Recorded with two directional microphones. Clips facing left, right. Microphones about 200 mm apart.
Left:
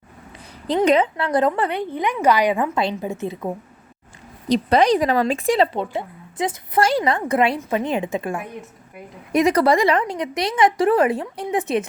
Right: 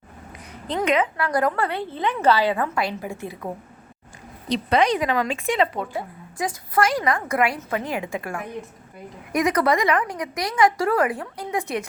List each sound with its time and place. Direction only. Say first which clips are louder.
0.8 s speech: left 4 dB; 25° left (ahead or behind)
4.4 s speech: left 4 dB; 40° left (ahead or behind); by 11.9 s 25° left (ahead or behind)